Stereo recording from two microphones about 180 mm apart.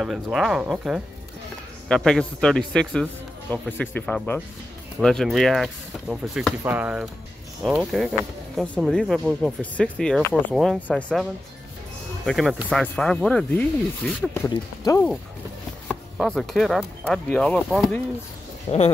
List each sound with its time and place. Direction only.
0.0 s a man's voice: centre (ahead or behind)
12.3 s a man's voice: centre (ahead or behind)
14.5 s speech: 20° left (ahead or behind)
15.9 s a man's voice: 5° left (ahead or behind)
18.7 s speech: 35° left (ahead or behind)